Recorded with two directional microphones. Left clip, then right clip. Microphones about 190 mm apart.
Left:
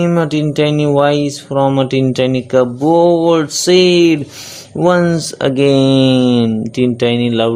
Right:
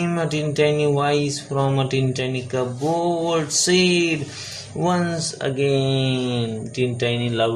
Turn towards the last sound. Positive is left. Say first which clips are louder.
# left 8 dB
turn(degrees=50)  # may be behind; listen again after turning